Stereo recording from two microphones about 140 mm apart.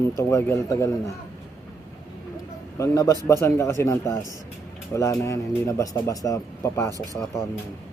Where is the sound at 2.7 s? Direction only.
20° left (ahead or behind).